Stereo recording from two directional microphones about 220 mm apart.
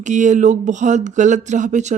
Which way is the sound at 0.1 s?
35° right (ahead or behind).